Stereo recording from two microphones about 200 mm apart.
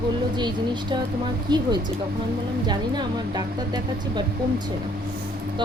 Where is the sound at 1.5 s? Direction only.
20° right (ahead or behind).